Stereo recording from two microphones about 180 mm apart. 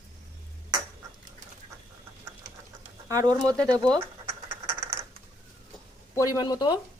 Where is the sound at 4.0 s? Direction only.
15° right (ahead or behind).